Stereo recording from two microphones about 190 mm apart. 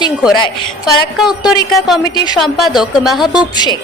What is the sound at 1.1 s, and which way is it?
Speech, centre (ahead or behind).